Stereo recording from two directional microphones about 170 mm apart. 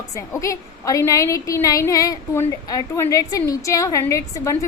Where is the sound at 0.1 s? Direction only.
20° left (ahead or behind).